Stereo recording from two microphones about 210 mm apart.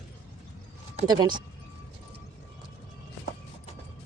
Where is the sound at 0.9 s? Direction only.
20° right (ahead or behind).